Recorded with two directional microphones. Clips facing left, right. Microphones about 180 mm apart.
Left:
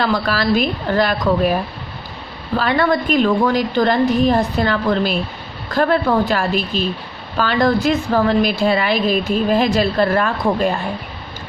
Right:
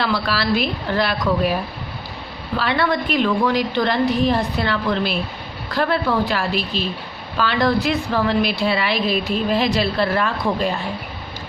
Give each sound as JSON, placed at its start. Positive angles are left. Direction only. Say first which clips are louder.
{"t": 0.0, "sound": "a woman's voice", "louder": "left 3 dB", "side_deg": 45}
{"t": 2.6, "sound": "a woman's voice", "louder": "left 4 dB", "side_deg": 45}